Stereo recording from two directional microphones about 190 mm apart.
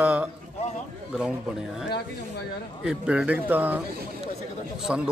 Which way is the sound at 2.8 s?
5° right (ahead or behind).